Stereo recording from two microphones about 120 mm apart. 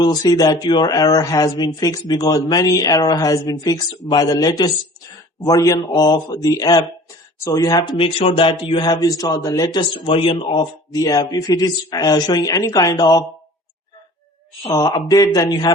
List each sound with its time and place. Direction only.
0.0 s speech: 35° left (ahead or behind)
7.9 s a sound: 50° left (ahead or behind)
8.8 s speech: 35° left (ahead or behind)
9.9 s a sound: 50° left (ahead or behind)
10.9 s speech: 30° left (ahead or behind)
14.7 s speech: 25° left (ahead or behind)